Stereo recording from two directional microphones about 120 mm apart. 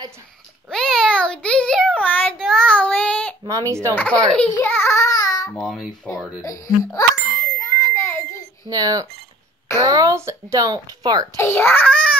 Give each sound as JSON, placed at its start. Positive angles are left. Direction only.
{"t": 0.7, "sound": "a sound", "side_deg": 0}
{"t": 2.0, "sound": "child singing", "side_deg": 10}
{"t": 3.4, "sound": "speech", "side_deg": -25}
{"t": 3.9, "sound": "a child's voice", "side_deg": 10}
{"t": 4.6, "sound": "child singing", "side_deg": 20}
{"t": 5.6, "sound": "a child's voice", "side_deg": 5}
{"t": 6.4, "sound": "speech", "side_deg": 30}
{"t": 7.5, "sound": "a sound", "side_deg": 25}
{"t": 8.6, "sound": "a child's voice", "side_deg": -30}
{"t": 11.3, "sound": "a child's voice", "side_deg": 20}